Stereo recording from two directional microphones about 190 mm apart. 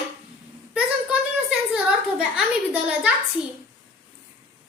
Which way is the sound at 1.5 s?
5° right (ahead or behind).